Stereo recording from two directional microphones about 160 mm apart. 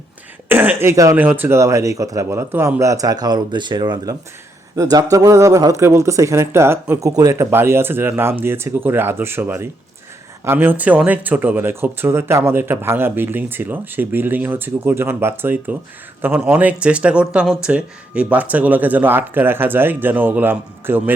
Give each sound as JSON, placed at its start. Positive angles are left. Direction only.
{"t": 0.4, "sound": "speech", "side_deg": -10}